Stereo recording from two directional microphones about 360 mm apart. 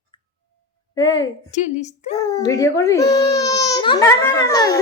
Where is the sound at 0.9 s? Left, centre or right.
Centre.